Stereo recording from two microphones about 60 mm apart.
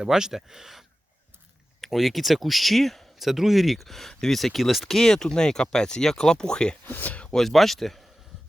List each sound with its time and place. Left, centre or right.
0.0 s speech: centre
4.9 s speech: centre
6.8 s speech: left
7.3 s speech: centre